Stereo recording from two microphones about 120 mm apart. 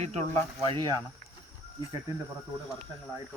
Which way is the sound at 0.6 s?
35° right (ahead or behind).